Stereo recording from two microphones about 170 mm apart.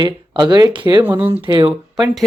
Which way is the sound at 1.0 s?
10° right (ahead or behind).